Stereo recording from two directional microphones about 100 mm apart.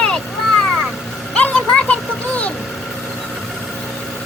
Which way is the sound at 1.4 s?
10° left (ahead or behind).